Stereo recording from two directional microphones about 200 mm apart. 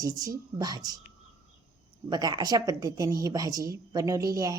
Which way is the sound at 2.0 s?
20° right (ahead or behind).